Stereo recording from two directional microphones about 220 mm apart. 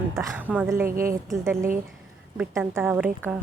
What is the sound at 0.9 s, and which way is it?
Speech, 40° right (ahead or behind).